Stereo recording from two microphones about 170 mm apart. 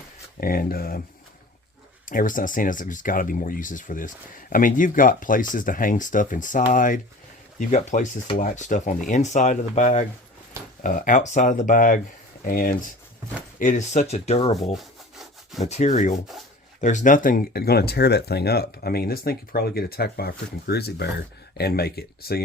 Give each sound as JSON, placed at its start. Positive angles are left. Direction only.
{"t": 0.3, "sound": "speech", "side_deg": 60}
{"t": 2.0, "sound": "speech", "side_deg": 50}
{"t": 13.6, "sound": "speech", "side_deg": 45}
{"t": 14.7, "sound": "wood", "side_deg": 0}
{"t": 15.6, "sound": "speech", "side_deg": 45}